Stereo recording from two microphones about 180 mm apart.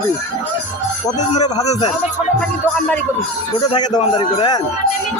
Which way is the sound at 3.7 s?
25° left (ahead or behind).